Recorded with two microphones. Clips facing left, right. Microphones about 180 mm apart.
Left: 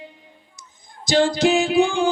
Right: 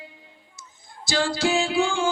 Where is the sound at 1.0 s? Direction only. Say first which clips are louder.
Left 6 dB; 20° left (ahead or behind).